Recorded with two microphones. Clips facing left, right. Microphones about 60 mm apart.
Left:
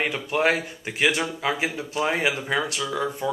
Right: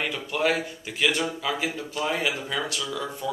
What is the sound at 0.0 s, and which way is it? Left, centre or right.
Speech, left.